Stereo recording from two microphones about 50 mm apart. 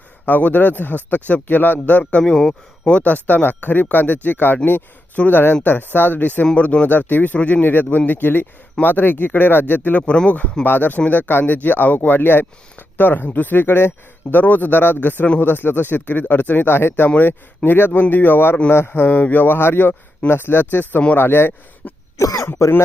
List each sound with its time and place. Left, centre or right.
0.3 s speech: left
2.2 s speech: centre
3.0 s speech: left
7.3 s speech: left
7.7 s speech: left
10.1 s speech: left
22.4 s throat clearing: left